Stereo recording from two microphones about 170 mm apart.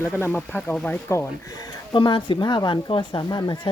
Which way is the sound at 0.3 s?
10° left (ahead or behind).